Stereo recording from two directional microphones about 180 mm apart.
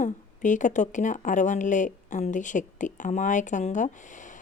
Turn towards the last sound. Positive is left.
turn(degrees=45)  # may be behind; listen again after turning